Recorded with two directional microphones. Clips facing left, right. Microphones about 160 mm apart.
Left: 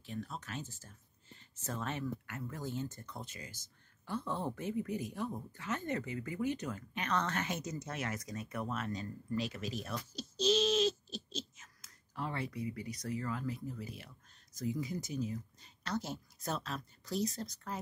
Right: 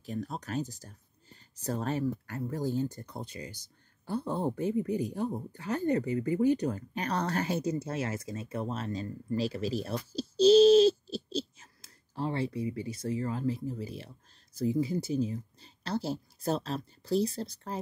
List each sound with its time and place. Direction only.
0.0 s speech: 40° right (ahead or behind)